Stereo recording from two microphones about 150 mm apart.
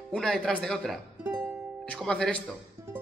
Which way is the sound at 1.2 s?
15° right (ahead or behind).